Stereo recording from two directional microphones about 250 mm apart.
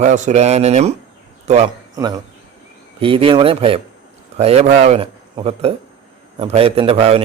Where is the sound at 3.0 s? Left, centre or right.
Right.